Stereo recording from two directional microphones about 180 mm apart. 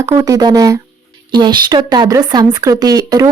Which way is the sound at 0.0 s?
15° right (ahead or behind).